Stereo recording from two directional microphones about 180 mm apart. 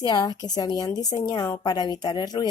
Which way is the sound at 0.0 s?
20° left (ahead or behind).